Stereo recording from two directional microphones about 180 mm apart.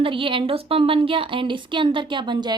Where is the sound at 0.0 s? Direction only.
30° right (ahead or behind).